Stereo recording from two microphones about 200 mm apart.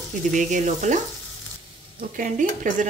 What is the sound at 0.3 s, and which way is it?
Speech, 40° right (ahead or behind).